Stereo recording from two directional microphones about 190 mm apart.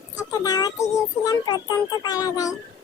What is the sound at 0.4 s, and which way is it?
A child's voice, 20° left (ahead or behind).